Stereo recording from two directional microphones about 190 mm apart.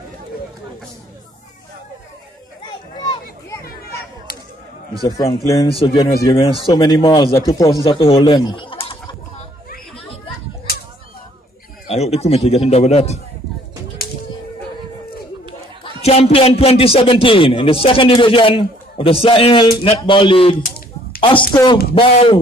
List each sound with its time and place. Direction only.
3.0 s children playing: 20° left (ahead or behind)
5.0 s a man's voice: 20° left (ahead or behind)
6.2 s a man's voice: 30° left (ahead or behind)
9.9 s children playing: 30° left (ahead or behind)
11.9 s a man's voice: 35° left (ahead or behind)
16.0 s a man's voice: 30° left (ahead or behind)